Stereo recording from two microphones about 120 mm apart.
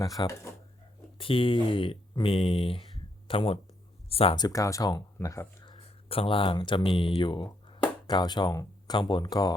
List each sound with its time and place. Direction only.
0.0 s speech: 30° left (ahead or behind)
1.2 s speech: 50° left (ahead or behind)
4.4 s speech: 30° left (ahead or behind)
5.8 s speech: 50° left (ahead or behind); by 9.6 s 35° left (ahead or behind)